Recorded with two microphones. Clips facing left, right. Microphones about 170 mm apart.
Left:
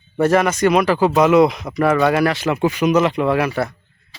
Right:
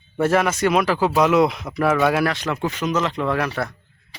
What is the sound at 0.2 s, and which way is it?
Speech, centre (ahead or behind).